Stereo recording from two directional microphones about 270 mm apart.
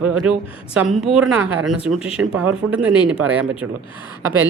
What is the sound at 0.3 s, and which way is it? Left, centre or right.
Speech, centre.